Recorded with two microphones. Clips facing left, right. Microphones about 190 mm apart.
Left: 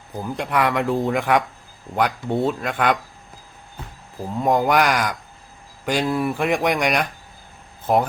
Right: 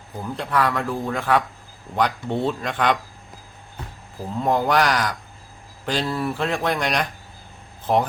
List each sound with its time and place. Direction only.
0.2 s speech: 15° left (ahead or behind)
4.4 s speech: 10° left (ahead or behind)